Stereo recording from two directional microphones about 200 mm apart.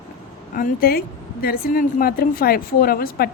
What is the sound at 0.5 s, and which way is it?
Speech, 45° left (ahead or behind).